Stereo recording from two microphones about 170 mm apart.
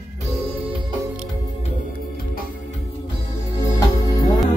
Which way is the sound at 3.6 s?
20° left (ahead or behind).